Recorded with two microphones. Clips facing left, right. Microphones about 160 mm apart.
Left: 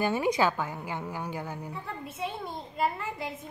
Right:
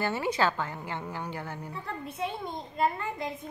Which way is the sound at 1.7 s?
Centre (ahead or behind).